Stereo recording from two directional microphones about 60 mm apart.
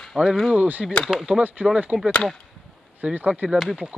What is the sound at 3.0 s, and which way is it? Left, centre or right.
Speech, right.